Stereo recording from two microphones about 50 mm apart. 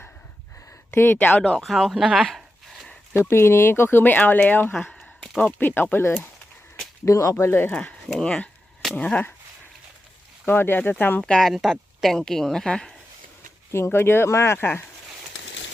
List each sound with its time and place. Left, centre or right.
0.9 s speech: left
1.5 s speech: centre
3.2 s speech: left
4.7 s a sound: centre
5.5 s speech: left
7.0 s speech: left
7.7 s speech: centre
10.4 s speech: left
11.2 s speech: centre
11.5 s speech: centre
13.7 s speech: left